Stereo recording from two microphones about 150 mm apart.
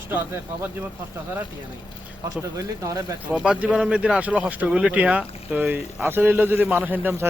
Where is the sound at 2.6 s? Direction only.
20° right (ahead or behind).